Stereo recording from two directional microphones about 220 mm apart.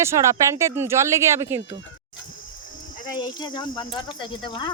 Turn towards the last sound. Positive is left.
turn(degrees=20)  # may be behind; listen again after turning